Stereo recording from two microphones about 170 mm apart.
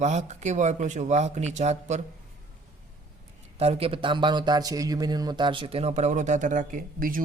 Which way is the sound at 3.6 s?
35° right (ahead or behind).